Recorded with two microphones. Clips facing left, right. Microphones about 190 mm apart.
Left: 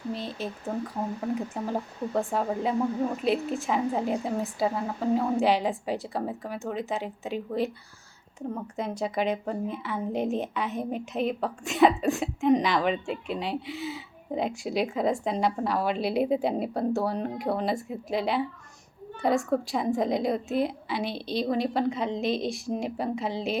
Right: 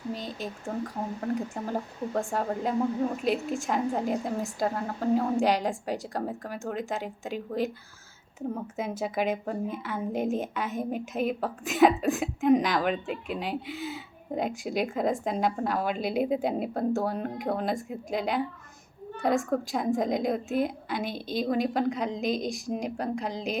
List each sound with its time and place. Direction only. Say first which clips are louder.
0.1 s speech: left 2 dB; 40° right (ahead or behind)
1.2 s a woman's voice: right 2 dB; centre (ahead or behind)
21.0 s a woman's voice: left 3 dB; 45° right (ahead or behind)
21.3 s a woman's voice: even; centre (ahead or behind)